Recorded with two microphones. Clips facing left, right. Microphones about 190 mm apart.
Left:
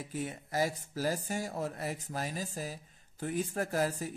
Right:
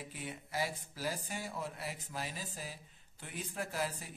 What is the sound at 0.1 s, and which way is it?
Speech, 45° left (ahead or behind).